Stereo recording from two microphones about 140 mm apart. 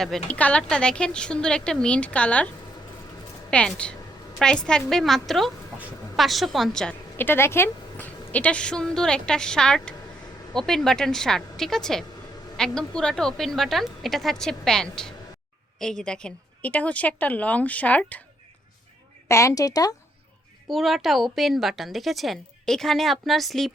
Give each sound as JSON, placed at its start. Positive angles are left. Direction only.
{"t": 0.0, "sound": "a woman's voice", "side_deg": 5}
{"t": 3.5, "sound": "a woman's voice", "side_deg": 5}
{"t": 7.2, "sound": "a woman's voice", "side_deg": 15}
{"t": 19.3, "sound": "a woman's voice", "side_deg": 20}
{"t": 20.7, "sound": "a woman's voice", "side_deg": 0}